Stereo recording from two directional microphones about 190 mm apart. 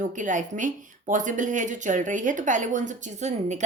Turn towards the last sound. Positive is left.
turn(degrees=-35)  # may be behind; listen again after turning